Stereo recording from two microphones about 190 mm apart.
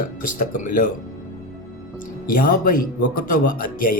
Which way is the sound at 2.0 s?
45° left (ahead or behind).